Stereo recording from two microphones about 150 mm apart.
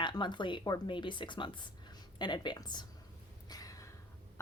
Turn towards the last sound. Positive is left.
turn(degrees=25)  # may be behind; listen again after turning